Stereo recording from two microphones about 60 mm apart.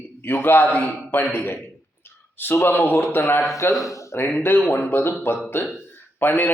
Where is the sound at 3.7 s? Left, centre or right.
Left.